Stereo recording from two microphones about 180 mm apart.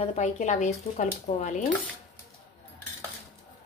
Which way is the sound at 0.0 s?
40° left (ahead or behind).